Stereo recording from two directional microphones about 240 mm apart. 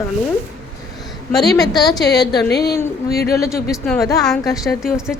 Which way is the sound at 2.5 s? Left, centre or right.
Left.